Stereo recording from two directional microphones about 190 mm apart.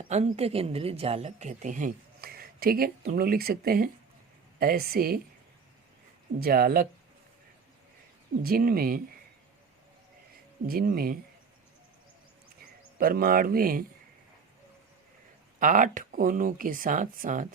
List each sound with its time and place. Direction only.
0.0 s speech: 35° right (ahead or behind); by 5.2 s 50° right (ahead or behind)
6.4 s speech: 50° right (ahead or behind)
8.4 s speech: 50° right (ahead or behind)
10.7 s speech: 50° right (ahead or behind)
13.0 s speech: 50° right (ahead or behind)
15.5 s speech: 45° right (ahead or behind)